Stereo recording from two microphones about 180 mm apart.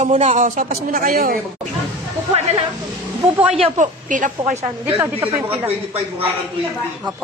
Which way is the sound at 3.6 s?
45° right (ahead or behind).